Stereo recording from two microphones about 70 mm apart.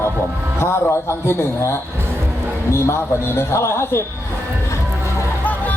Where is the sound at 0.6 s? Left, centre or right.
Left.